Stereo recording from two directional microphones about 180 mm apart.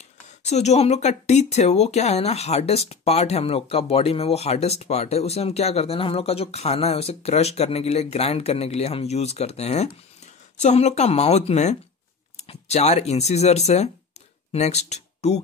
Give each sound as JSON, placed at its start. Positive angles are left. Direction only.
{"t": 0.5, "sound": "speech", "side_deg": 40}